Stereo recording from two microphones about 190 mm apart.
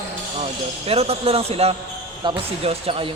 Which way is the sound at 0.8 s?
30° right (ahead or behind).